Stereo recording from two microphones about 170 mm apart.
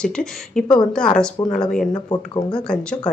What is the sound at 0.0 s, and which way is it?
Speech, 5° left (ahead or behind).